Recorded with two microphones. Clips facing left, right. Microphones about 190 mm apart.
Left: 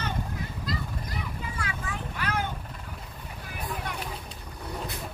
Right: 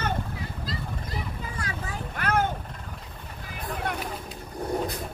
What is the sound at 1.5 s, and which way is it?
Vehicle, 40° right (ahead or behind).